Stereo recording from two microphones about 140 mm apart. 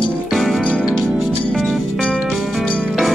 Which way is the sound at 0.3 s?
Centre (ahead or behind).